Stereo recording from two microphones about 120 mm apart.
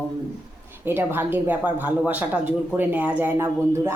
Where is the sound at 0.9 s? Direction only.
15° right (ahead or behind).